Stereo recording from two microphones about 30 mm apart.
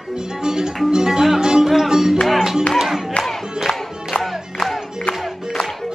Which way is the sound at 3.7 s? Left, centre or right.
Left.